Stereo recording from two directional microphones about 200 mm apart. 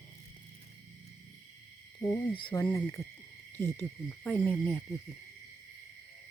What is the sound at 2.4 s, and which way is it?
Speech, 25° left (ahead or behind).